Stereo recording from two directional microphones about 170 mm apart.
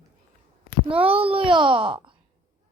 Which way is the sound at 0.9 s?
35° right (ahead or behind).